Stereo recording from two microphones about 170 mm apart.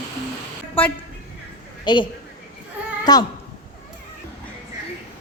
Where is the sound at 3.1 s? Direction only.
25° left (ahead or behind).